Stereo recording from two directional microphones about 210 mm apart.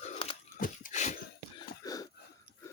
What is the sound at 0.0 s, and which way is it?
Pig, 30° left (ahead or behind).